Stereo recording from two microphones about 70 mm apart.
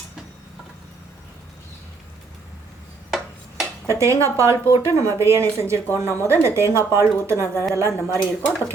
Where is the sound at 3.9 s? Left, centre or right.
Right.